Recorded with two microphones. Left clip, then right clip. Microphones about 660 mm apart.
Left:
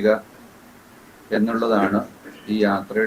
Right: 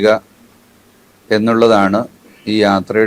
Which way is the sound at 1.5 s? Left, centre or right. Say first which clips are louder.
Right 10 dB; right.